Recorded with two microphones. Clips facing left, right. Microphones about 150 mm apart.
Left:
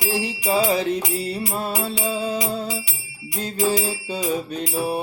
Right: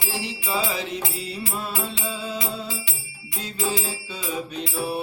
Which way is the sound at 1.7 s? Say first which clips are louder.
Left 5 dB; 15° left (ahead or behind).